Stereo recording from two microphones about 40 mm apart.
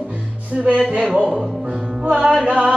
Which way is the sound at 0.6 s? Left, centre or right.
Centre.